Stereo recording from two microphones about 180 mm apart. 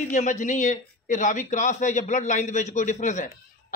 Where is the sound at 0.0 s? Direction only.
40° left (ahead or behind).